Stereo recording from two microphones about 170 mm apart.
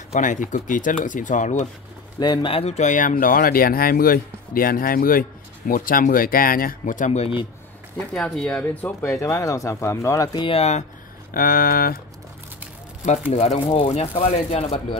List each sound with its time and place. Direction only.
0.1 s speech: 50° left (ahead or behind)
2.1 s speech: 25° left (ahead or behind)
8.1 s speech: 5° left (ahead or behind); by 10.9 s 40° left (ahead or behind)
11.3 s speech: 60° left (ahead or behind)
13.3 s speech: 40° left (ahead or behind)